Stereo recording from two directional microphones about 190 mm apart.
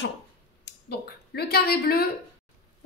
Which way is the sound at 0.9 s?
55° left (ahead or behind).